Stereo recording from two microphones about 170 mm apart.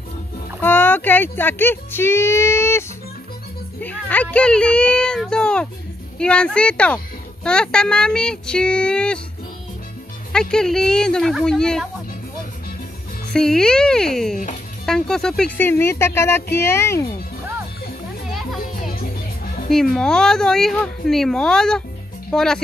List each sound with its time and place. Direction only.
0.6 s speech: 10° left (ahead or behind)
3.8 s speech: 10° left (ahead or behind)
10.5 s speech: 5° left (ahead or behind)
13.3 s speech: 5° left (ahead or behind)
18.6 s music: 55° left (ahead or behind)
19.7 s speech: 5° left (ahead or behind)